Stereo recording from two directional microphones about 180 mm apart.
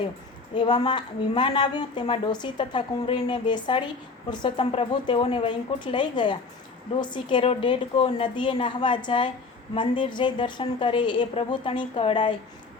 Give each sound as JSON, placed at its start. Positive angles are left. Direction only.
{"t": 0.5, "sound": "a woman's voice", "side_deg": 25}